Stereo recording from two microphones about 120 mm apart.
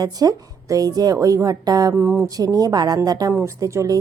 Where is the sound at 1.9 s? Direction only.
20° right (ahead or behind).